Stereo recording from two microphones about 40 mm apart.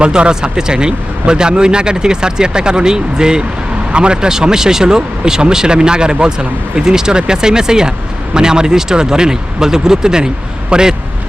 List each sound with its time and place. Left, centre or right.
0.0 s speech: right